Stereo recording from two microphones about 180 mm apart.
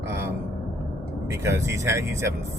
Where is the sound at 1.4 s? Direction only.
15° right (ahead or behind).